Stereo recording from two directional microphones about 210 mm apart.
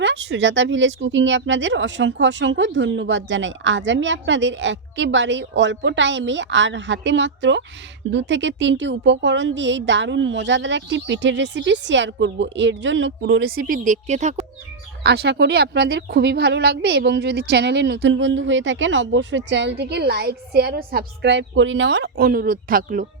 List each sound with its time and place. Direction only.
0.0 s speech: 60° right (ahead or behind)
13.6 s a woman's voice: 40° right (ahead or behind)
15.0 s speech: 50° right (ahead or behind)